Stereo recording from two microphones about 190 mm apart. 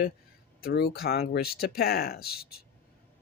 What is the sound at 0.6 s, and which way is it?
Speech, 55° left (ahead or behind).